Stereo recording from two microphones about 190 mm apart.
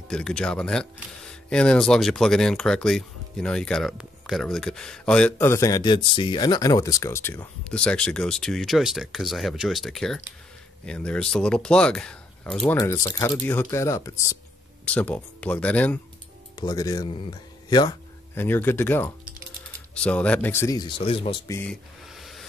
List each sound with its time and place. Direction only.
0.1 s speech: 5° left (ahead or behind)
12.7 s speech: 20° left (ahead or behind)
16.5 s speech: 20° left (ahead or behind)
21.6 s hiss: centre (ahead or behind)